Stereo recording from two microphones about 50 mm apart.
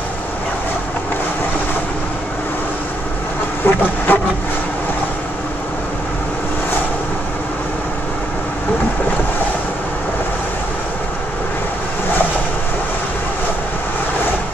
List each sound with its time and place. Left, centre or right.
3.6 s vehicle: left